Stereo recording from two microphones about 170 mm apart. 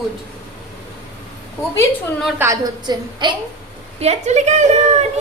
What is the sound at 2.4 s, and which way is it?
Speech, 20° right (ahead or behind).